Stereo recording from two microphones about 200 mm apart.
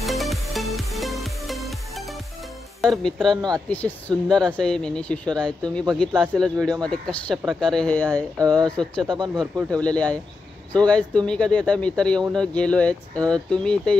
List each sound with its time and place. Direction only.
0.0 s music: centre (ahead or behind)
2.8 s speech: centre (ahead or behind)
3.3 s speech: 20° right (ahead or behind)
3.7 s speech: 10° left (ahead or behind)
9.1 s speech: 20° right (ahead or behind)
9.7 s speech: 5° left (ahead or behind)